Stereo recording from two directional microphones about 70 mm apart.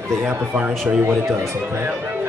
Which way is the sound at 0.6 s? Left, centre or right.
Centre.